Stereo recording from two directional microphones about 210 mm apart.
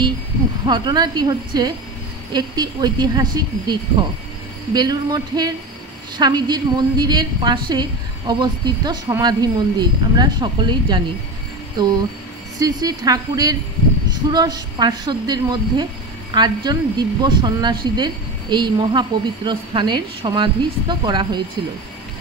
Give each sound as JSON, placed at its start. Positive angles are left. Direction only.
{"t": 0.7, "sound": "a woman's voice", "side_deg": -20}